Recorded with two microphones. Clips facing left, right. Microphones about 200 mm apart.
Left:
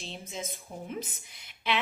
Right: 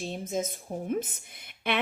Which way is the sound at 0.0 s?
50° right (ahead or behind).